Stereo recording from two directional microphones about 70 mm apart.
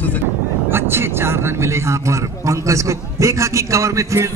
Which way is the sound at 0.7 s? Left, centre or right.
Right.